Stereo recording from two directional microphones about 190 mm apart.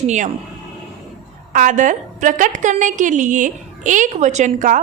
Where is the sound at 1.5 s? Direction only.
40° right (ahead or behind).